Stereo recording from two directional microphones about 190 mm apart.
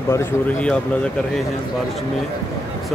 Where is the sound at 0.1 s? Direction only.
10° left (ahead or behind).